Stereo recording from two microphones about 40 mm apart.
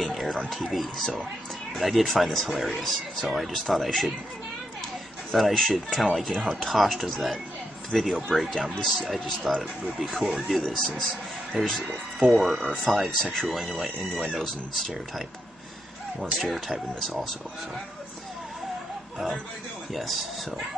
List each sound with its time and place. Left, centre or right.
0.0 s music: centre
0.5 s speech: centre
5.3 s speech: centre
10.8 s speech: centre
12.3 s speech: centre
13.2 s speech: centre
13.6 s speech: centre
13.9 s speech: centre
16.3 s speech: centre